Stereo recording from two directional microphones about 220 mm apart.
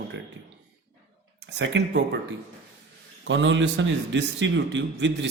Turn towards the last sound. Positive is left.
turn(degrees=-55)  # may be behind; listen again after turning